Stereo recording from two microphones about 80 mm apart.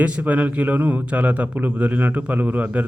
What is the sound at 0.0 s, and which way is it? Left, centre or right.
A man's voice, centre.